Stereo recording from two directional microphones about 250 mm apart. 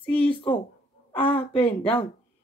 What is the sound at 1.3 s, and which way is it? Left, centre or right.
Speech, left.